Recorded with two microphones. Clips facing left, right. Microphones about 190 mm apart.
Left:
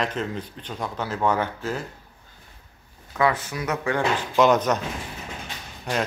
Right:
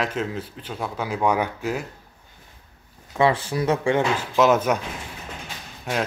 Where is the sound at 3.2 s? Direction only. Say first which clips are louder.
Right 3 dB; 30° right (ahead or behind).